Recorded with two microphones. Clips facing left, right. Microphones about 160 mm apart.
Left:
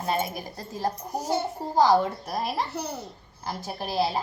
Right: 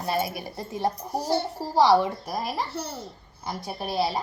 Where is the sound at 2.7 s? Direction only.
15° left (ahead or behind).